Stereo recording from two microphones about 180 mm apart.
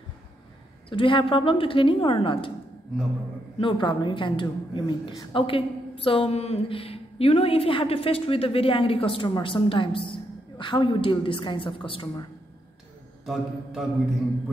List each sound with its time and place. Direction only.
0.8 s a woman's voice: 30° left (ahead or behind)
3.5 s a woman's voice: 25° left (ahead or behind)
13.2 s mantra: centre (ahead or behind)